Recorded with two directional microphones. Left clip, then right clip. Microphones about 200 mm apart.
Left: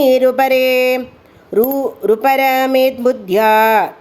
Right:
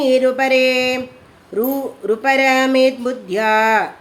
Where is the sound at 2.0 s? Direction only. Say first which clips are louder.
Left 2 dB; 30° left (ahead or behind).